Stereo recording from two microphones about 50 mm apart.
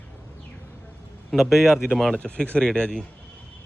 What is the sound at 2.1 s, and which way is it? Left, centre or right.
Speech, left.